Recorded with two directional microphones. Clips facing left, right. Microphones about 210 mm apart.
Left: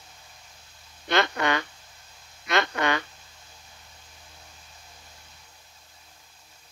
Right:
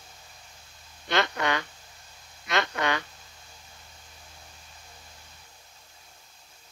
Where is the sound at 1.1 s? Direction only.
55° left (ahead or behind).